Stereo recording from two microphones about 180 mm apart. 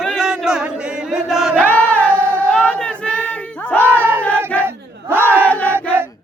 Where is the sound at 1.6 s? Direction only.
10° left (ahead or behind).